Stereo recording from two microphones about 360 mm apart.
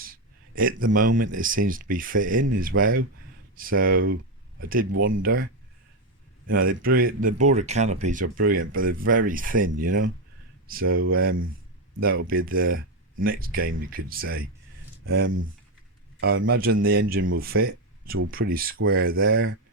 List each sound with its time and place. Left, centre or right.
0.0 s a sound: right
0.9 s speech: right
6.5 s speech: right